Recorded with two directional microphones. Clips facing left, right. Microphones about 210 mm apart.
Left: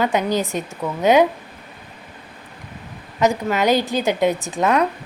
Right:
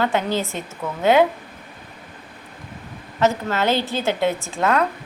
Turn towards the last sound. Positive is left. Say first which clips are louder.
# left 2 dB
turn(degrees=15)  # may be behind; listen again after turning